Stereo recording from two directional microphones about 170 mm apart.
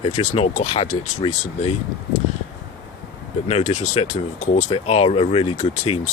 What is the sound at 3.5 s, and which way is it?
Speech, 40° left (ahead or behind).